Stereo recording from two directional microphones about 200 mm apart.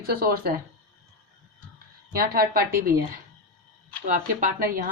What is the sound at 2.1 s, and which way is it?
Speech, 50° right (ahead or behind).